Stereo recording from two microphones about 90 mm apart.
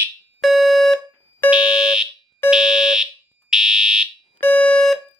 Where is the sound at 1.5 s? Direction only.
10° right (ahead or behind).